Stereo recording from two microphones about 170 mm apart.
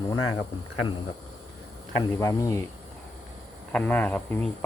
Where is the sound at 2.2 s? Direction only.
20° left (ahead or behind).